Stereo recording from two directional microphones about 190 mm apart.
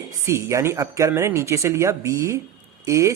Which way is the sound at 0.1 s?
15° right (ahead or behind).